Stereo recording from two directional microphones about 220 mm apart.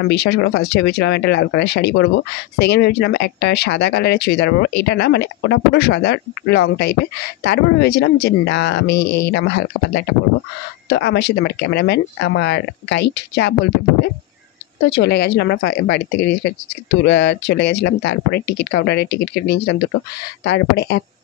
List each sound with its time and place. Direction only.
0.1 s speech: 50° left (ahead or behind)
14.9 s speech: 45° left (ahead or behind)